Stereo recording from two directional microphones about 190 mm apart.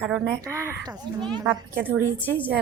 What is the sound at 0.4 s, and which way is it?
A woman's voice, 15° right (ahead or behind).